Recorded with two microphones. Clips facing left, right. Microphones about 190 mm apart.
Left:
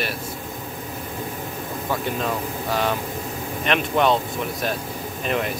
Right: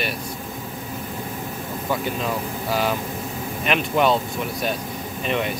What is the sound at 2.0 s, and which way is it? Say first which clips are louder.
Speech: even; centre (ahead or behind).